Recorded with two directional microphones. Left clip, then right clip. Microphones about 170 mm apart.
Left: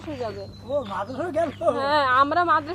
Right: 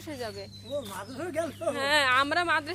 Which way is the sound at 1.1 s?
50° right (ahead or behind).